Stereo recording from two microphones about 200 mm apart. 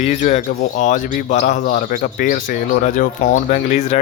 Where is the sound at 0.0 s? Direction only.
35° left (ahead or behind).